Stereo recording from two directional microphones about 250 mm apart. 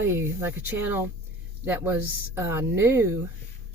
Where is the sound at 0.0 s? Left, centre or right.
Centre.